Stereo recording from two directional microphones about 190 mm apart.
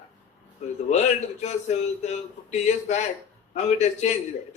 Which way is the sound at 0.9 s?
35° left (ahead or behind).